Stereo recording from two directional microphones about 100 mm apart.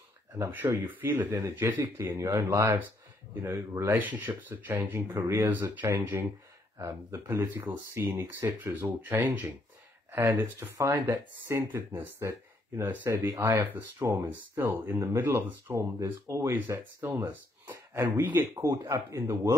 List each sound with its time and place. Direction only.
0.5 s speech: 20° right (ahead or behind)
12.2 s speech: 30° right (ahead or behind)